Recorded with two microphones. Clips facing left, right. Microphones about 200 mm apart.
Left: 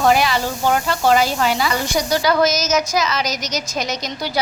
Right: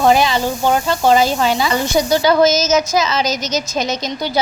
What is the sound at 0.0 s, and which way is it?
A woman's voice, 25° right (ahead or behind).